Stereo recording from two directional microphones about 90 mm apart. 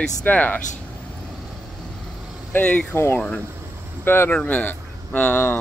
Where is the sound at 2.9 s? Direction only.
30° left (ahead or behind).